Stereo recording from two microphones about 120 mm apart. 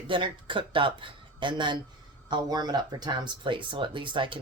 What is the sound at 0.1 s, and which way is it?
Speech, 45° right (ahead or behind).